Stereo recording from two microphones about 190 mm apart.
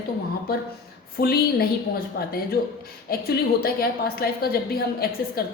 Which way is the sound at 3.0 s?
55° left (ahead or behind).